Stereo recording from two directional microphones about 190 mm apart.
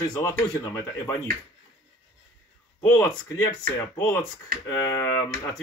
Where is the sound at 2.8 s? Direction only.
10° left (ahead or behind).